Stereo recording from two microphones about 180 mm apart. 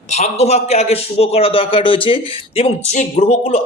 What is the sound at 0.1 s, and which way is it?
Speech, 40° left (ahead or behind).